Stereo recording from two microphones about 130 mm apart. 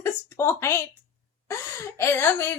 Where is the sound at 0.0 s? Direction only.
20° left (ahead or behind).